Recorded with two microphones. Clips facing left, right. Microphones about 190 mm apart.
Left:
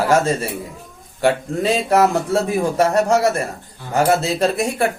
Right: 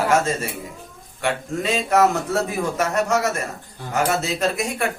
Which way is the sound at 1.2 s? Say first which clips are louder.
Left 6 dB; 35° left (ahead or behind).